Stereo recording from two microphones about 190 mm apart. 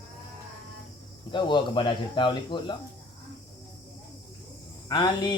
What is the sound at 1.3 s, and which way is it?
Speech, 25° left (ahead or behind).